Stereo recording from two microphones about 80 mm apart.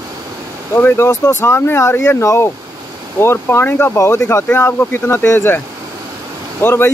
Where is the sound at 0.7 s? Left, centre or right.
Left.